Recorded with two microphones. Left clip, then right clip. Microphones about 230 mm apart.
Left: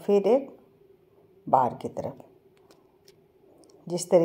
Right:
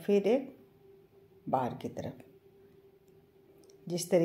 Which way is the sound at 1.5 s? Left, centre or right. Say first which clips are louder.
Left 10 dB; centre.